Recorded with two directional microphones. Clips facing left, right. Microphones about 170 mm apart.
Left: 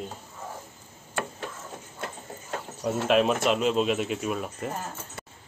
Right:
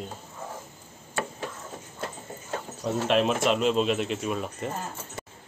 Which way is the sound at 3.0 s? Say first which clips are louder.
Left 1 dB; 5° left (ahead or behind).